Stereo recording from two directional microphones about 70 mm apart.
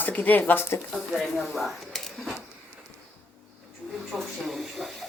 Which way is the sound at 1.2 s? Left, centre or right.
Centre.